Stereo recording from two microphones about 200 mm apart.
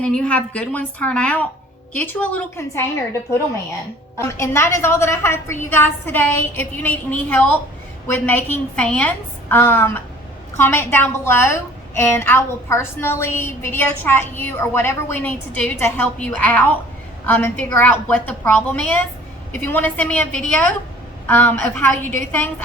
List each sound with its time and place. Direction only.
0.0 s a woman's voice: 5° left (ahead or behind)